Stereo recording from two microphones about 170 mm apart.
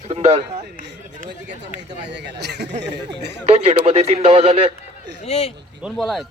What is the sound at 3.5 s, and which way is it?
A man's voice, 35° right (ahead or behind).